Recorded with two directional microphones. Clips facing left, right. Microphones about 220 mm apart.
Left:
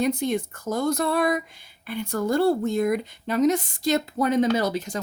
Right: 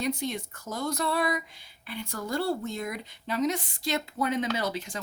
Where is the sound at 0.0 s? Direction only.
50° left (ahead or behind).